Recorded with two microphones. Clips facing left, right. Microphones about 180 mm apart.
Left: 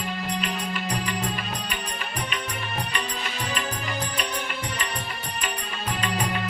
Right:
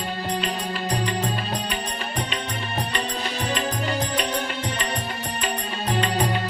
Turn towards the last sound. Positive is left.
turn(degrees=-30)  # may be behind; listen again after turning